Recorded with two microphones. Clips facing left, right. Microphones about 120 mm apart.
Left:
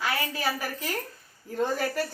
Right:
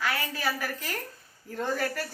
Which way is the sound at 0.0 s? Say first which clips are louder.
Left 1 dB; 20° left (ahead or behind).